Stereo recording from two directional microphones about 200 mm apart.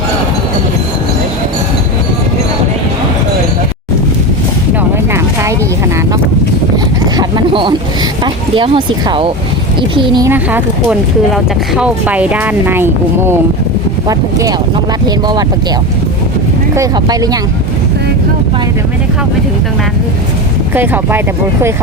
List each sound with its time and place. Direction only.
4.8 s a sound: 15° right (ahead or behind)
7.0 s a sound: 20° right (ahead or behind)
8.2 s speech: 25° right (ahead or behind)
10.2 s speech: 10° right (ahead or behind)
16.7 s speech: 20° right (ahead or behind)
20.7 s speech: 10° right (ahead or behind)